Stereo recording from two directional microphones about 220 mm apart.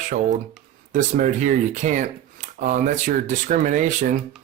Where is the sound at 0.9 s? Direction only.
35° right (ahead or behind).